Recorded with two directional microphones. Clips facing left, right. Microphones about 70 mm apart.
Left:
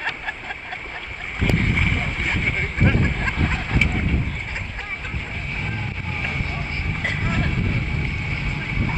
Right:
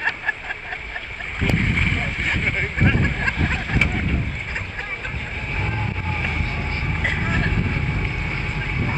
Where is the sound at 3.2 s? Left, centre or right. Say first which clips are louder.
Right 1 dB; centre.